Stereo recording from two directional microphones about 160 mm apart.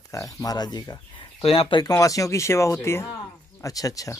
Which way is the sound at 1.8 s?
20° left (ahead or behind).